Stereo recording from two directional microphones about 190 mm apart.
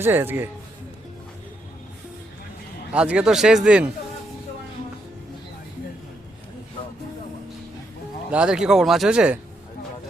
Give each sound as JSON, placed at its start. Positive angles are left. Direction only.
{"t": 0.0, "sound": "a man's voice", "side_deg": -10}
{"t": 2.9, "sound": "speech", "side_deg": -5}
{"t": 8.3, "sound": "speech", "side_deg": -5}